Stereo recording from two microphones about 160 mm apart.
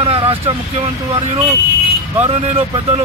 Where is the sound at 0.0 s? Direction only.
35° right (ahead or behind).